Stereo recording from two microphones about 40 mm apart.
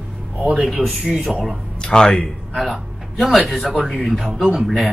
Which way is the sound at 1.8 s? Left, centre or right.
Left.